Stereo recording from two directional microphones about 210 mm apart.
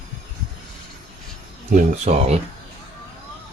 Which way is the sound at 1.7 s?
30° right (ahead or behind).